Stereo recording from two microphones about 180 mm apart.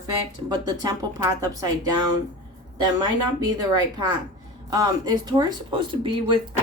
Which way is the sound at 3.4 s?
20° right (ahead or behind).